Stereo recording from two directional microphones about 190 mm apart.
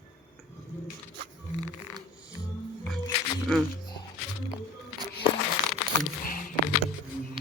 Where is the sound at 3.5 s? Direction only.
5° left (ahead or behind).